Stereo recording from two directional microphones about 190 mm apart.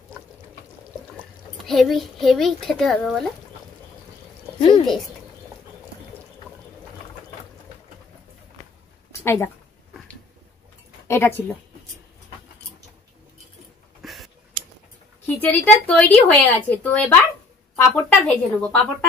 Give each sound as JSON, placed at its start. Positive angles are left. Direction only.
{"t": 1.7, "sound": "a child's voice", "side_deg": 0}
{"t": 4.6, "sound": "speech", "side_deg": 25}
{"t": 4.8, "sound": "a child's voice", "side_deg": 0}
{"t": 9.2, "sound": "speech", "side_deg": 15}
{"t": 11.1, "sound": "speech", "side_deg": 15}
{"t": 14.0, "sound": "a sound", "side_deg": 0}
{"t": 15.4, "sound": "speech", "side_deg": 10}